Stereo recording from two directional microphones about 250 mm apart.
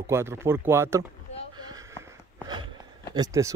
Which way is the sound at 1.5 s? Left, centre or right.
Centre.